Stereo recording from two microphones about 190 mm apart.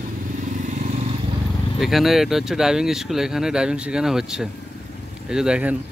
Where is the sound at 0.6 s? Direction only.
40° right (ahead or behind).